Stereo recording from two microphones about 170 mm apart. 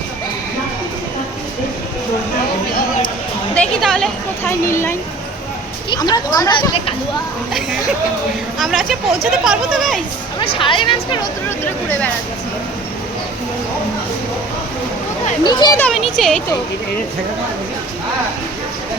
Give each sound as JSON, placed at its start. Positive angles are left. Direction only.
{"t": 3.5, "sound": "a woman's voice", "side_deg": 5}
{"t": 4.4, "sound": "speech", "side_deg": 15}
{"t": 8.5, "sound": "speech", "side_deg": 0}
{"t": 10.4, "sound": "speech", "side_deg": 30}
{"t": 15.4, "sound": "speech", "side_deg": 25}
{"t": 15.8, "sound": "speech", "side_deg": 0}